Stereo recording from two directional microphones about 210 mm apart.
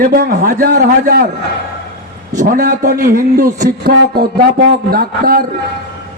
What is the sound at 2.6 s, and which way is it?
A man's voice, 50° right (ahead or behind).